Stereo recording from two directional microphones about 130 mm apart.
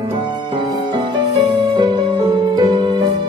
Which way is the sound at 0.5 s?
35° right (ahead or behind).